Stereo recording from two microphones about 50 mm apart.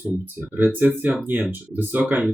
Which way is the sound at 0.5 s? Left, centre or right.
Right.